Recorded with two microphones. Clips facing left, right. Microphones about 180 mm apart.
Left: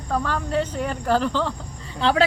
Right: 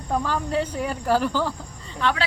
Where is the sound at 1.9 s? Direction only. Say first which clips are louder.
Left 3 dB; 30° left (ahead or behind).